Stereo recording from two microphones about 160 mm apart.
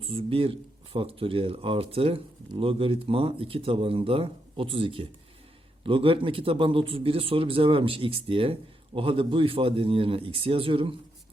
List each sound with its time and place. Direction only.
0.0 s speech: 35° right (ahead or behind)